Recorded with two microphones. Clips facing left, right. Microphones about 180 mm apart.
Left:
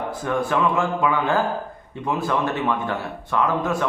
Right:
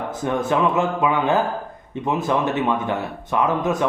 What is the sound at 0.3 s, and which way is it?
Speech, 20° right (ahead or behind).